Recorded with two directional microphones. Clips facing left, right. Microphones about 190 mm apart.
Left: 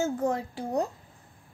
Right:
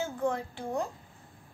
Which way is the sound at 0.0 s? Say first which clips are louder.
Left 4 dB; 40° left (ahead or behind).